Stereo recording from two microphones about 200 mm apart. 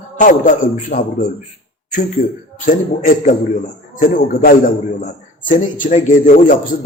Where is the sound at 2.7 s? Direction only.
40° left (ahead or behind).